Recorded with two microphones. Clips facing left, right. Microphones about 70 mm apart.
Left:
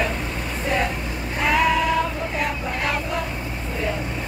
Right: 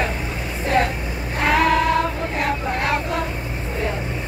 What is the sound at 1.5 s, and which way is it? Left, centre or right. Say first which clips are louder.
Child singing: right 2 dB; right.